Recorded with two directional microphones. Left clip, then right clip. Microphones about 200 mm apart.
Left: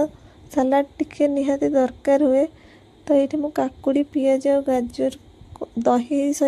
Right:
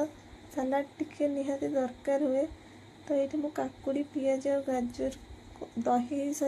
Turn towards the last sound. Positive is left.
turn(degrees=40)  # may be behind; listen again after turning